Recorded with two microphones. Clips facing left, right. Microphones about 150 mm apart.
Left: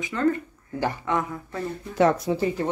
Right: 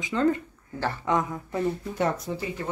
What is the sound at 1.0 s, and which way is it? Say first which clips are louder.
Speech: right 1 dB; 20° right (ahead or behind).